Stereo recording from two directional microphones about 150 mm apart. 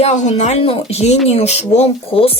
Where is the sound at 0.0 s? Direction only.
50° left (ahead or behind).